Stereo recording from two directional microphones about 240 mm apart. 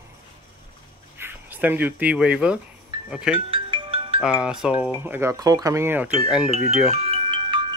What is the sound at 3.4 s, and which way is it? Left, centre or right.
Music, right.